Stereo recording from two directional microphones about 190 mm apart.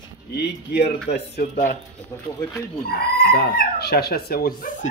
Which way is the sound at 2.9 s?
55° left (ahead or behind).